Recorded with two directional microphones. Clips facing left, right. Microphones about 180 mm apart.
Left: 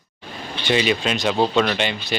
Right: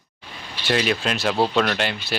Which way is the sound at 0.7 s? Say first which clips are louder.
Left 2 dB; centre (ahead or behind).